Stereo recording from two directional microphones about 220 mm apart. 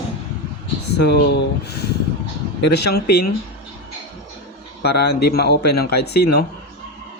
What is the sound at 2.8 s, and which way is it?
Speech, 45° left (ahead or behind).